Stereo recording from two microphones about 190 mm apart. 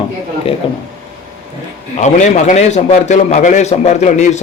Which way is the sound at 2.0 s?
40° left (ahead or behind).